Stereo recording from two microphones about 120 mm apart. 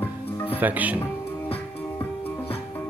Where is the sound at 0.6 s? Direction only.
15° right (ahead or behind).